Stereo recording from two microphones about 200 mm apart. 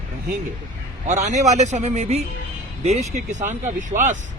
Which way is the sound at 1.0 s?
35° right (ahead or behind).